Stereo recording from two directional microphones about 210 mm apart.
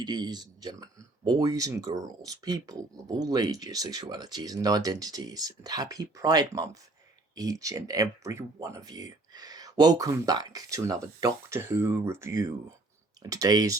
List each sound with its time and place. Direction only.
0.0 s speech: 20° right (ahead or behind)